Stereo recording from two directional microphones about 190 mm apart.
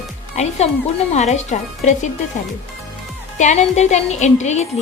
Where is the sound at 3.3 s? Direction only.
40° left (ahead or behind).